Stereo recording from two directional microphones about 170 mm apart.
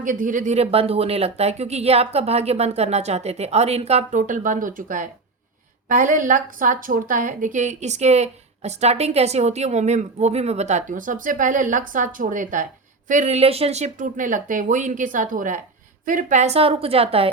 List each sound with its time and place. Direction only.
0.0 s a woman's voice: 50° right (ahead or behind); by 17.3 s 35° right (ahead or behind)